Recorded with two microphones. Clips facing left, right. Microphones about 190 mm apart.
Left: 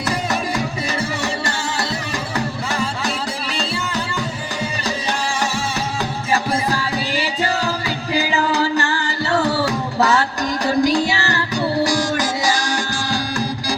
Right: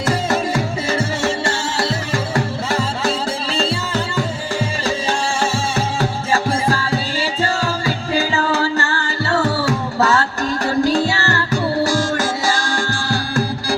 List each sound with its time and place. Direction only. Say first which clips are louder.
2.7 s music: right 5 dB; 25° right (ahead or behind)
6.7 s music: right 2 dB; 15° left (ahead or behind)